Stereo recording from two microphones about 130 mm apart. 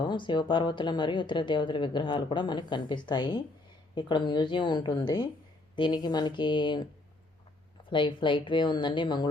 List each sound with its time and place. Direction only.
0.0 s speech: 35° left (ahead or behind)
7.9 s speech: 40° left (ahead or behind)